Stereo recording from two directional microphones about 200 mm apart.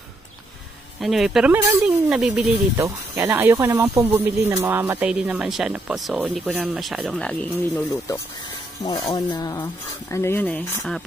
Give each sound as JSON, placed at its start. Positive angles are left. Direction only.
{"t": 1.0, "sound": "speech", "side_deg": 0}
{"t": 8.8, "sound": "speech", "side_deg": 20}